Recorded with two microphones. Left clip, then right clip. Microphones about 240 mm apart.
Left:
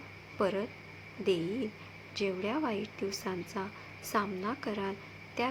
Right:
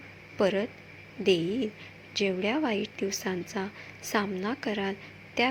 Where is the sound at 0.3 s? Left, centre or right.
Centre.